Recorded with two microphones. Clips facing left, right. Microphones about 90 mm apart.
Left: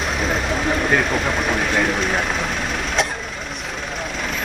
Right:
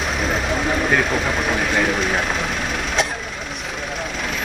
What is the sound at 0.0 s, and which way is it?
Vehicle, centre (ahead or behind).